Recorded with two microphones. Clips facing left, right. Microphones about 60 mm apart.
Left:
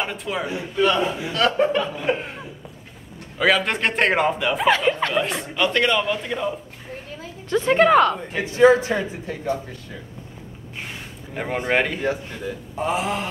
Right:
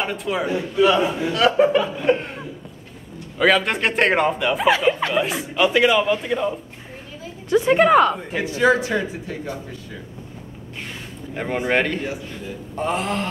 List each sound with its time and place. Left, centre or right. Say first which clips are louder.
0.0 s a man's voice: right 3 dB; centre
8.5 s speech: left 3 dB; left
11.3 s speech: right 1 dB; centre